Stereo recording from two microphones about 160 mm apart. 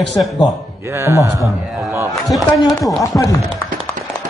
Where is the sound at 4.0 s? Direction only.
55° right (ahead or behind).